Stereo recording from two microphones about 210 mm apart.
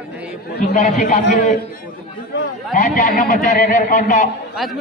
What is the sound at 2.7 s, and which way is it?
A man's voice, 35° left (ahead or behind).